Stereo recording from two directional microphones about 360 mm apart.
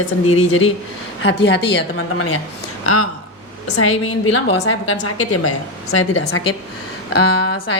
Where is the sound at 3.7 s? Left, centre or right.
Left.